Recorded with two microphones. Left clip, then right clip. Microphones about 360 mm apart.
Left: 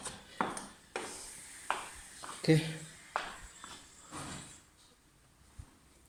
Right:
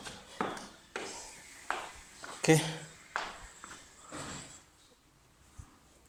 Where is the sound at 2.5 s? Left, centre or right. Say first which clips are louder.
Right 3 dB; right.